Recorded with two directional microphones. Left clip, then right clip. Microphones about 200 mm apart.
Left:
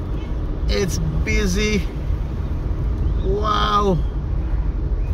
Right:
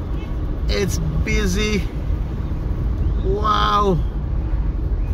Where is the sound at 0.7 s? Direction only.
15° right (ahead or behind).